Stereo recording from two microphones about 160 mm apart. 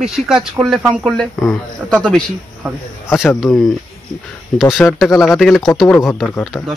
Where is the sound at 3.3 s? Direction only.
Centre (ahead or behind).